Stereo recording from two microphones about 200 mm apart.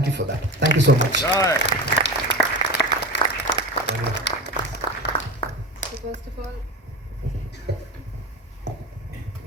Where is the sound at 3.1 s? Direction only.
60° left (ahead or behind).